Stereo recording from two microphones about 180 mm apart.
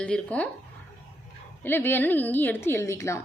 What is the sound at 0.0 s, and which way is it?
Speech, 10° left (ahead or behind).